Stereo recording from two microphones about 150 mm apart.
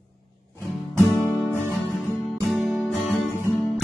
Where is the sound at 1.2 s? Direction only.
10° left (ahead or behind).